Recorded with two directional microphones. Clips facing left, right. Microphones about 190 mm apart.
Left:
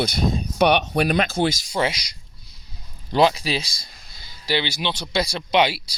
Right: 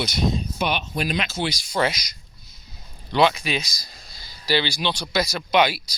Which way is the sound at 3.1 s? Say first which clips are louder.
Left 1 dB; 35° left (ahead or behind).